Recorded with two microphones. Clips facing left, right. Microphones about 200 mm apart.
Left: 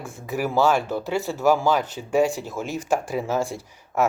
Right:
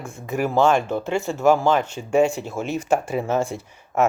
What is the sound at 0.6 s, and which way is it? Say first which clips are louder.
Speech: right 2 dB; 5° left (ahead or behind).